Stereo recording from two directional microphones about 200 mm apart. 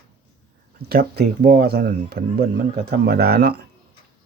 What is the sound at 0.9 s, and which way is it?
Speech, 50° right (ahead or behind).